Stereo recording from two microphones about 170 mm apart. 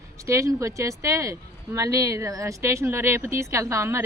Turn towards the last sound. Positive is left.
turn(degrees=-15)  # may be behind; listen again after turning